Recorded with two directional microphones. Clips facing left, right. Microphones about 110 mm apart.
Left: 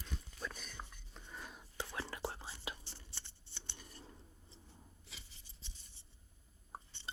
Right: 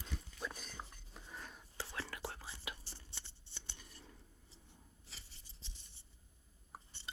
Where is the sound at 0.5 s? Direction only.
35° right (ahead or behind).